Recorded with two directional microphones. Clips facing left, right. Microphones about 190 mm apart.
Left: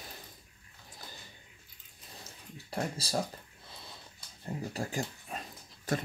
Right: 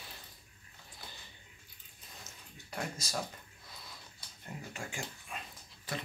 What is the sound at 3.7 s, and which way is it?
Dog, 25° left (ahead or behind).